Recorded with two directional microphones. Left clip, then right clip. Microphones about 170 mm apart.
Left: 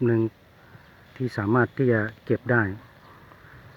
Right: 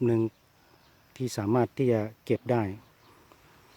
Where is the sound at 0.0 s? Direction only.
20° right (ahead or behind).